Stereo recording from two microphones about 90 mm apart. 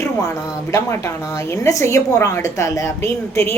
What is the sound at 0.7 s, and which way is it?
A woman's voice, 35° left (ahead or behind).